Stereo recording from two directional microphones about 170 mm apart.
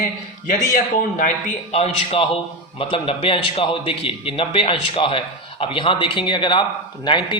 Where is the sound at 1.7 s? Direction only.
35° left (ahead or behind).